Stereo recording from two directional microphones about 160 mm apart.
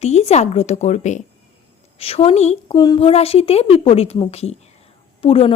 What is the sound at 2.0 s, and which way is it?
Speech, 35° left (ahead or behind).